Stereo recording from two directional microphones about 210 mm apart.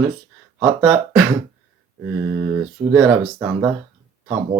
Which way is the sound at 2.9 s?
5° right (ahead or behind).